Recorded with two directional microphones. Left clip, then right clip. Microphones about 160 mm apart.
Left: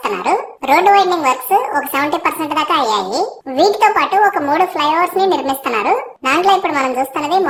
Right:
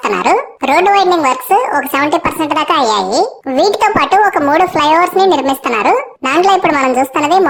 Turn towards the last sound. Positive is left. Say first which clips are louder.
# right 5 dB
turn(degrees=-35)  # may be behind; listen again after turning